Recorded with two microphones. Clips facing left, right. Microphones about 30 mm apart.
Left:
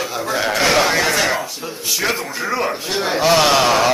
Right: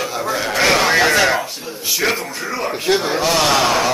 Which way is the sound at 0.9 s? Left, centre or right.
Centre.